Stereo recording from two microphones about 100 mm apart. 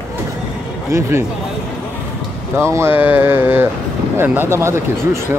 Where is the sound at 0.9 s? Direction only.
30° right (ahead or behind).